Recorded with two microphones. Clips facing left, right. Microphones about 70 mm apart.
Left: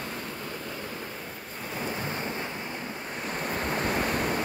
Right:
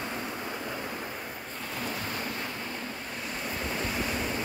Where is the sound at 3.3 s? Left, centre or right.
Left.